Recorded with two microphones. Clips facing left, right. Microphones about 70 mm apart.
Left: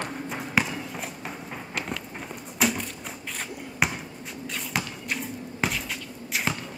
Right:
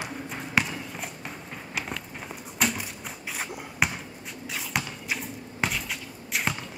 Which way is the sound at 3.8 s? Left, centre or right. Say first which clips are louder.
Left 1 dB; centre.